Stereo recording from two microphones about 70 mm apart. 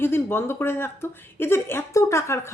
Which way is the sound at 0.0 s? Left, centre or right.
Left.